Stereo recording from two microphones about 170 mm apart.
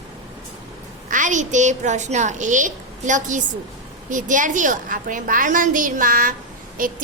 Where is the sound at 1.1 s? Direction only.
45° right (ahead or behind).